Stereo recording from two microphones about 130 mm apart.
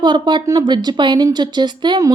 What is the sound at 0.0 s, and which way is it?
A woman's voice, 35° right (ahead or behind).